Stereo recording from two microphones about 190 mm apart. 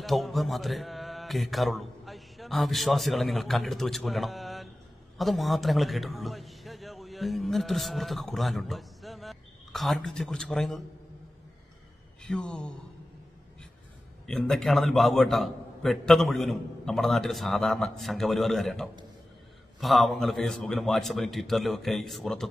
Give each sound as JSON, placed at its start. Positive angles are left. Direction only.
{"t": 0.0, "sound": "a man's voice", "side_deg": 0}
{"t": 12.2, "sound": "speech", "side_deg": 5}
{"t": 14.2, "sound": "a man's voice", "side_deg": 5}